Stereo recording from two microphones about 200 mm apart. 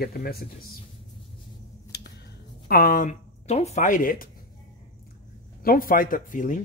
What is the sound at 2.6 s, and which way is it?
Speech, 45° left (ahead or behind).